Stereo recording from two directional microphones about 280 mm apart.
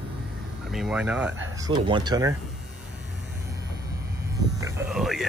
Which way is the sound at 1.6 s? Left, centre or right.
Centre.